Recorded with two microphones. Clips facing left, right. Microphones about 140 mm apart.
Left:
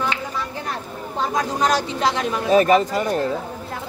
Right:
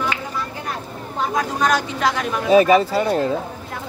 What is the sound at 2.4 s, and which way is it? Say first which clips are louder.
Speech: right 2 dB; 10° right (ahead or behind).